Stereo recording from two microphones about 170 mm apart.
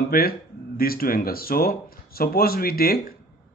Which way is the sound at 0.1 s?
60° left (ahead or behind).